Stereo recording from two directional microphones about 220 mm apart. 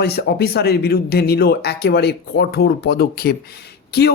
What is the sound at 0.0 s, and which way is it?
A woman's voice, 45° left (ahead or behind).